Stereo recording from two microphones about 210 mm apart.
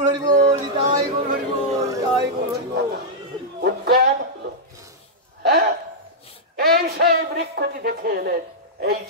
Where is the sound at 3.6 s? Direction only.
50° right (ahead or behind).